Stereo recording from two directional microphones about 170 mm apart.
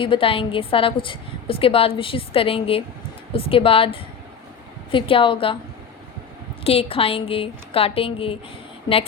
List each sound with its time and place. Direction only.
0.0 s a woman's voice: 30° left (ahead or behind)
6.7 s a woman's voice: 35° left (ahead or behind)